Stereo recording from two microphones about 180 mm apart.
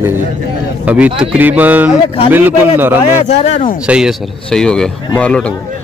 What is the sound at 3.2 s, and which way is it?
Speech, 35° left (ahead or behind).